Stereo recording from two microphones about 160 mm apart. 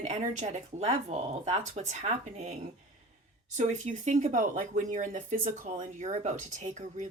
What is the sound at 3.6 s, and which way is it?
Speech, 45° right (ahead or behind).